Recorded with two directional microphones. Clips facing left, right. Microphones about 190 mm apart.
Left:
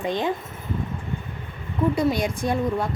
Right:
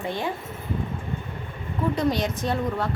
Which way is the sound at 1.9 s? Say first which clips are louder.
Left 2 dB; 10° left (ahead or behind).